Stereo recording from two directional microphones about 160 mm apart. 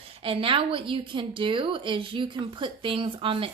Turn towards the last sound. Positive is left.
turn(degrees=-35)  # may be behind; listen again after turning